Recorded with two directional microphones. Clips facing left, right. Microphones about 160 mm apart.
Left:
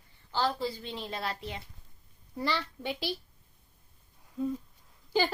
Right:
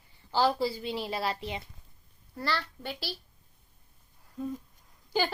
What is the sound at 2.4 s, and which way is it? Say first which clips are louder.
Speech: left 1 dB; 15° left (ahead or behind).